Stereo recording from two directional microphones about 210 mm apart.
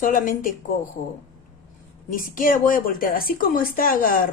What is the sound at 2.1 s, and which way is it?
A woman's voice, 40° left (ahead or behind).